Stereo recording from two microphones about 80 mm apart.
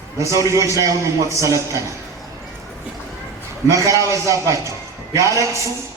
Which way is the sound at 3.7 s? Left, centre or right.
Right.